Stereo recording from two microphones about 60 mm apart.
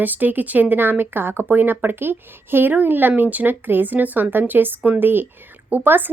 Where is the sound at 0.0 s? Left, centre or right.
Right.